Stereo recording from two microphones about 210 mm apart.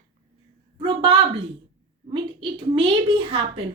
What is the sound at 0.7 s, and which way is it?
A woman's voice, 25° right (ahead or behind).